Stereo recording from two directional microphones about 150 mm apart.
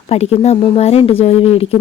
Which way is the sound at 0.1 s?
40° left (ahead or behind).